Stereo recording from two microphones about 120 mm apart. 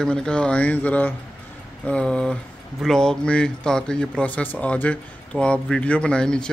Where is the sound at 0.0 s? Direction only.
5° left (ahead or behind).